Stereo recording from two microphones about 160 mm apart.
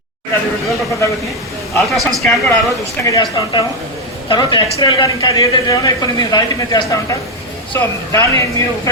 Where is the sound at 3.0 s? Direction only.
25° left (ahead or behind).